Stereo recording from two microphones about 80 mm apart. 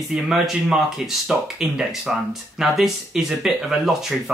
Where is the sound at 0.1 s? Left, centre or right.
Centre.